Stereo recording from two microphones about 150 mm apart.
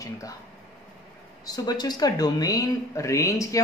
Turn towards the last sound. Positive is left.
turn(degrees=20)  # may be behind; listen again after turning